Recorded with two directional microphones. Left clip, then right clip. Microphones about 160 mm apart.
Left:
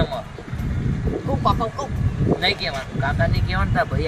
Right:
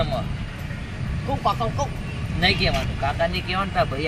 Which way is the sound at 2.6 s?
15° left (ahead or behind).